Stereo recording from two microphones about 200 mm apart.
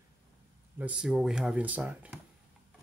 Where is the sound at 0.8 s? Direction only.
5° right (ahead or behind).